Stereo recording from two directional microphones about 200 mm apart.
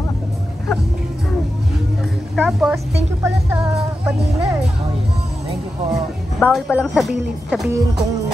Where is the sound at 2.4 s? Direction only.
Centre (ahead or behind).